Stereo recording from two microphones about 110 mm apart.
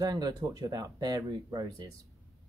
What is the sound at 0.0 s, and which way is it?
Speech, 35° right (ahead or behind).